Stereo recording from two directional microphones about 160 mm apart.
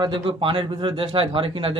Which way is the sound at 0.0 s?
30° right (ahead or behind).